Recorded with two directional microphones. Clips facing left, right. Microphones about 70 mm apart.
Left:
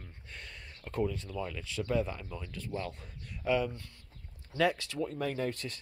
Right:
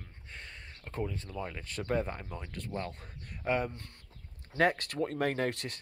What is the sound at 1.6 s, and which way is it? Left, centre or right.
Speech, right.